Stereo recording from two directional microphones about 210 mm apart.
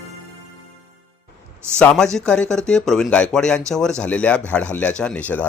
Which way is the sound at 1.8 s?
5° left (ahead or behind).